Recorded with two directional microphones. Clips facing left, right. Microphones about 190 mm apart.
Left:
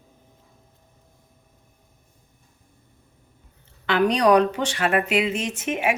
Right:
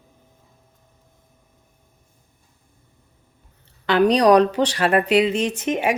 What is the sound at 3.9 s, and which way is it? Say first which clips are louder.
A woman's voice: right 3 dB; 35° right (ahead or behind).